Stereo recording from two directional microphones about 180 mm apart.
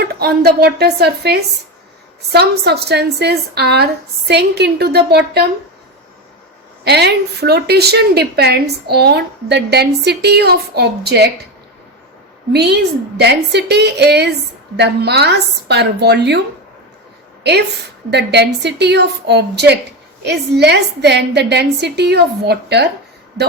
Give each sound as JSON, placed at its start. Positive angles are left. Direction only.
{"t": 0.0, "sound": "a woman's voice", "side_deg": -60}
{"t": 6.8, "sound": "a woman's voice", "side_deg": -65}
{"t": 12.5, "sound": "a woman's voice", "side_deg": -65}
{"t": 18.1, "sound": "a woman's voice", "side_deg": -65}